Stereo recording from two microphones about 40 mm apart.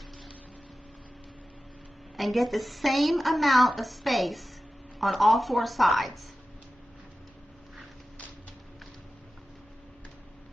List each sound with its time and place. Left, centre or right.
2.1 s a woman's voice: centre